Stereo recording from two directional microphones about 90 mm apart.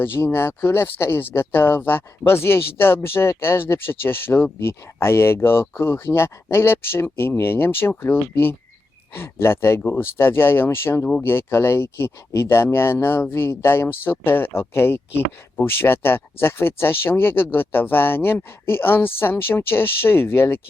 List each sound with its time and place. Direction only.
0.0 s speech: 25° left (ahead or behind)